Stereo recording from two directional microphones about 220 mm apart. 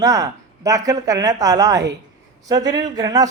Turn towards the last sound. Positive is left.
turn(degrees=-15)  # may be behind; listen again after turning